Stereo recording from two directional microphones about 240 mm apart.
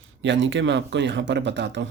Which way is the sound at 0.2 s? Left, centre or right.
Right.